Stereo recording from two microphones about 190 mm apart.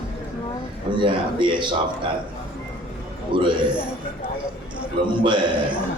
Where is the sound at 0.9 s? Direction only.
25° right (ahead or behind).